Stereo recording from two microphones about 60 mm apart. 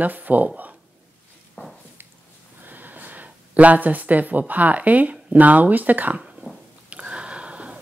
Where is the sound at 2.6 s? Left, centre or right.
Right.